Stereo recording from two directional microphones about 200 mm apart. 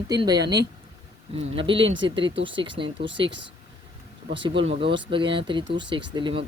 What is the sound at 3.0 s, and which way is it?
Speech, 65° right (ahead or behind).